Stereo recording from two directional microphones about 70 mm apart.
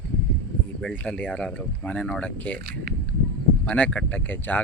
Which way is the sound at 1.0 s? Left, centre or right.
Centre.